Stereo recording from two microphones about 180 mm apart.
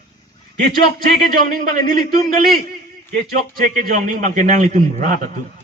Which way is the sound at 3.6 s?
50° right (ahead or behind).